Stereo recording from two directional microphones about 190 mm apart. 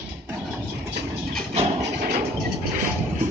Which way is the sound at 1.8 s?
55° right (ahead or behind).